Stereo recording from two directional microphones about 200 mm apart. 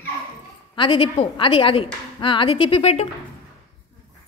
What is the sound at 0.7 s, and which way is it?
Speech, 25° left (ahead or behind).